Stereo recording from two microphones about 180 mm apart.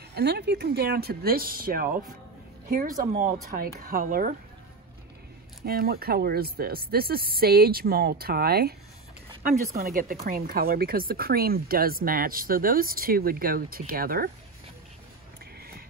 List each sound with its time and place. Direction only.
0.1 s speech: 65° right (ahead or behind)
5.7 s speech: 60° right (ahead or behind)
9.8 s speech: 55° right (ahead or behind)